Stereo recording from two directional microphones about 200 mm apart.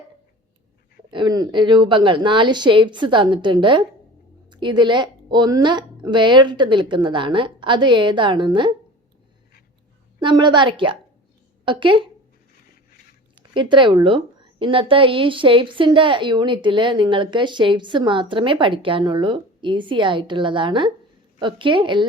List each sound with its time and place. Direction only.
1.1 s a woman's voice: 20° right (ahead or behind)
10.2 s a woman's voice: 20° right (ahead or behind)
13.5 s a woman's voice: 25° right (ahead or behind)